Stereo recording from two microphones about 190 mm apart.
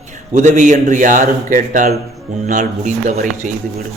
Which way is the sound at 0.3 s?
40° right (ahead or behind).